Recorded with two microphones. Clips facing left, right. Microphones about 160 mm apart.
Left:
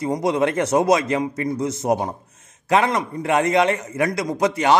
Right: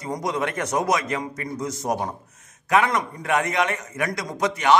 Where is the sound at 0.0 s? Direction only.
25° left (ahead or behind).